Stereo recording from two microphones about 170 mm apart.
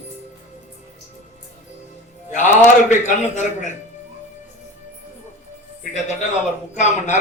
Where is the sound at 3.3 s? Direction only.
45° left (ahead or behind).